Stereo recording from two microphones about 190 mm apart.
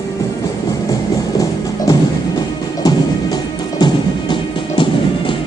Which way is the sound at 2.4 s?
20° left (ahead or behind).